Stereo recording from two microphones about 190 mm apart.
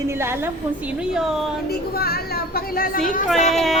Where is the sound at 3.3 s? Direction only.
35° left (ahead or behind).